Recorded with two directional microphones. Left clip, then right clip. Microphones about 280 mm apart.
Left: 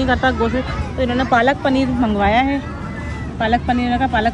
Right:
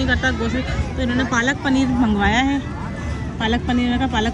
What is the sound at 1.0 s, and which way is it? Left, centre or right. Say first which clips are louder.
Speech: left 3 dB; left.